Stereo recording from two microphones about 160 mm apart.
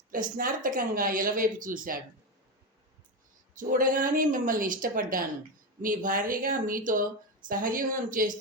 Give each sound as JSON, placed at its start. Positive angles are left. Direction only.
{"t": 0.1, "sound": "speech", "side_deg": -60}
{"t": 3.6, "sound": "speech", "side_deg": -55}